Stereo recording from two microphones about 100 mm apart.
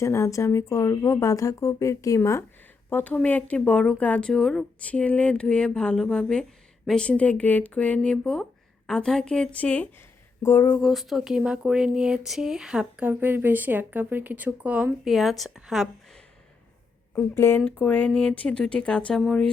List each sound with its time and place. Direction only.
0.0 s speech: 30° left (ahead or behind)
2.9 s speech: 15° left (ahead or behind)
10.4 s a sound: 25° left (ahead or behind)
10.8 s speech: centre (ahead or behind)
15.1 s a woman's voice: centre (ahead or behind)
17.3 s a sound: 25° left (ahead or behind)
17.7 s speech: 15° left (ahead or behind)